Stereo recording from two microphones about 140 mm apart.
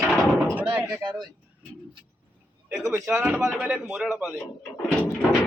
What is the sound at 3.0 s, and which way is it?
Speech, 5° right (ahead or behind).